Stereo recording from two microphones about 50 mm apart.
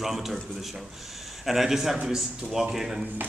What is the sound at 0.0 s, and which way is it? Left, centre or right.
A man's voice, centre.